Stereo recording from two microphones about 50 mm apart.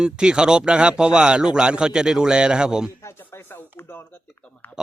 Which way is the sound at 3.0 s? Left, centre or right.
Left.